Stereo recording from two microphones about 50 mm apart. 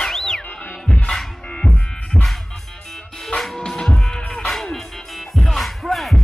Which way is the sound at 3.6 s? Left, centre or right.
Centre.